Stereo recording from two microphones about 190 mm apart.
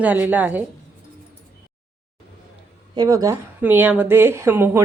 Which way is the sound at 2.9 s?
20° right (ahead or behind).